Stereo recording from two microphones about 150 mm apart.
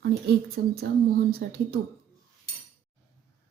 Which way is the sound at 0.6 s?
90° right.